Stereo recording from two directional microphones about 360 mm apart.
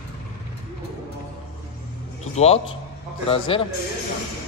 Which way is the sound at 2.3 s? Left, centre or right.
Centre.